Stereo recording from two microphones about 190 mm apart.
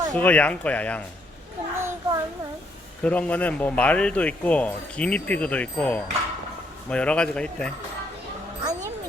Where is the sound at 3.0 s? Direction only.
5° left (ahead or behind).